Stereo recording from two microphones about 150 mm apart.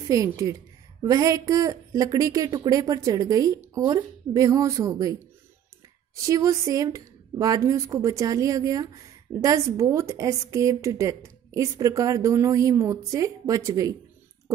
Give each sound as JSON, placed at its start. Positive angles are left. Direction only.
{"t": 0.1, "sound": "a woman's voice", "side_deg": -20}
{"t": 6.2, "sound": "a woman's voice", "side_deg": -20}